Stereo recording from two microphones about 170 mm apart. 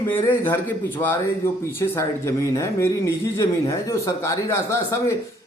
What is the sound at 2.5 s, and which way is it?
A man's voice, 15° left (ahead or behind).